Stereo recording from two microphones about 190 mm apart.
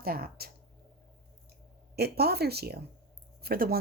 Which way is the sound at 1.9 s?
55° right (ahead or behind).